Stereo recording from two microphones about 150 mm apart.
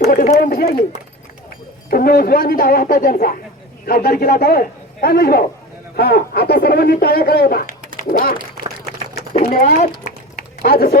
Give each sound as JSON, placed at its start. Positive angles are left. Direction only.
{"t": 0.0, "sound": "a sound", "side_deg": 75}
{"t": 0.3, "sound": "speech", "side_deg": 75}
{"t": 1.9, "sound": "speech", "side_deg": 90}
{"t": 7.9, "sound": "speech", "side_deg": 75}
{"t": 10.6, "sound": "speech", "side_deg": 90}